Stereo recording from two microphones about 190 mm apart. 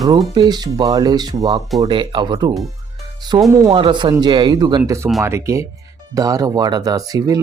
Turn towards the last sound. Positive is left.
turn(degrees=-20)  # may be behind; listen again after turning